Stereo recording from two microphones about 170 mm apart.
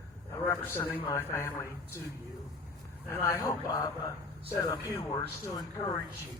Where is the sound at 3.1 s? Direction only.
15° left (ahead or behind).